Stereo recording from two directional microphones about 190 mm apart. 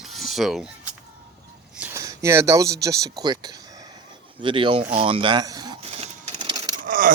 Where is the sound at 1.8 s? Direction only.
15° right (ahead or behind).